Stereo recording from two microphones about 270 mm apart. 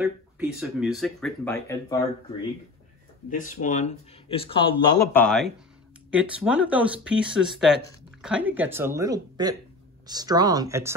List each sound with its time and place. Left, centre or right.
0.0 s speech: centre
3.3 s speech: left
4.9 s speech: centre